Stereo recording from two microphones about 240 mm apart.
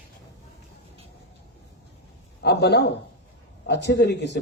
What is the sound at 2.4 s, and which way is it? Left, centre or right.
Speech, left.